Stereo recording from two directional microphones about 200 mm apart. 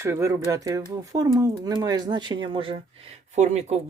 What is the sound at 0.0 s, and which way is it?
Speech, 15° right (ahead or behind).